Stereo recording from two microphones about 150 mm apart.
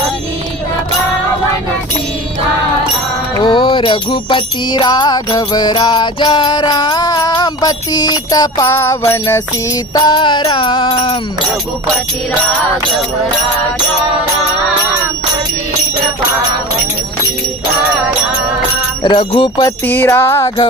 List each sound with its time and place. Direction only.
3.4 s music: 35° left (ahead or behind); by 9.4 s 15° left (ahead or behind)
9.9 s music: 30° left (ahead or behind)
19.0 s music: 30° left (ahead or behind)
19.8 s music: 15° left (ahead or behind)